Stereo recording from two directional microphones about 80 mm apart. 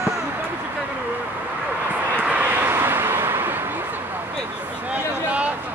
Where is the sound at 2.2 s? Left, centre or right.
Centre.